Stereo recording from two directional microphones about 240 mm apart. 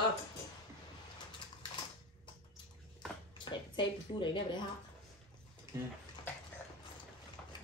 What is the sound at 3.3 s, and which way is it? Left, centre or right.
A woman's voice, centre.